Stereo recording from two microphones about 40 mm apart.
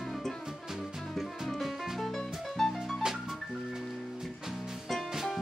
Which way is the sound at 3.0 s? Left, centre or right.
Centre.